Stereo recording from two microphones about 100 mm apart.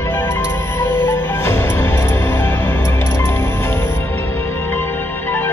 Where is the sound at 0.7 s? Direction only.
25° left (ahead or behind).